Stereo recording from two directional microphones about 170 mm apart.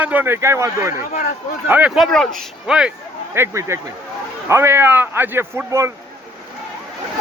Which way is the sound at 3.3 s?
15° right (ahead or behind).